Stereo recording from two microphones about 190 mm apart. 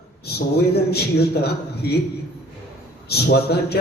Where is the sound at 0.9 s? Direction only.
55° left (ahead or behind).